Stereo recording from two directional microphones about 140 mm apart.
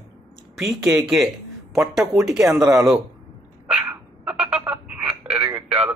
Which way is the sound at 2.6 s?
20° right (ahead or behind).